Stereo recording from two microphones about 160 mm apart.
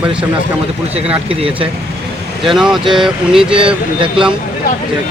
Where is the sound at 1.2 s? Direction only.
35° right (ahead or behind).